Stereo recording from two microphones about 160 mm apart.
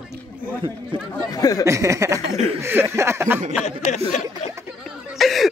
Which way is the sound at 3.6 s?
45° left (ahead or behind).